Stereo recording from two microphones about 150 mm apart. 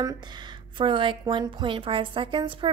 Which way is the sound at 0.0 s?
30° right (ahead or behind).